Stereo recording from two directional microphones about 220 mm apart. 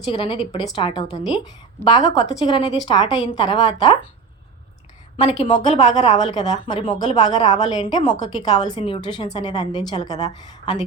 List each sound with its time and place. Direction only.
0.1 s a woman's voice: 25° left (ahead or behind)
5.2 s a woman's voice: 25° left (ahead or behind)